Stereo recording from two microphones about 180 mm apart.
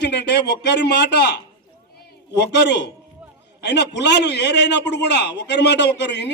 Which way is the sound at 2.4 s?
70° left (ahead or behind).